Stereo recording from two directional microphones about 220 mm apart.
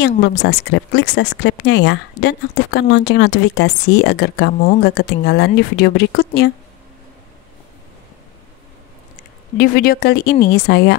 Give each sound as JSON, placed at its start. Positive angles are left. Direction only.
{"t": 0.0, "sound": "speech", "side_deg": 50}
{"t": 9.6, "sound": "speech", "side_deg": 45}